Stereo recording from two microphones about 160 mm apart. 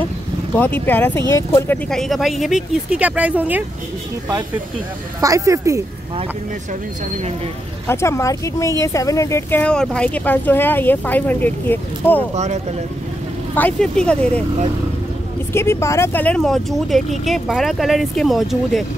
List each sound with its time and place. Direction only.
0.6 s speech: 10° left (ahead or behind)
1.9 s speech: centre (ahead or behind)
5.2 s speech: 20° right (ahead or behind)
6.7 s speech: 45° right (ahead or behind)
7.8 s speech: 15° left (ahead or behind)
13.6 s speech: 5° left (ahead or behind)
15.5 s speech: 15° left (ahead or behind); by 18.9 s centre (ahead or behind)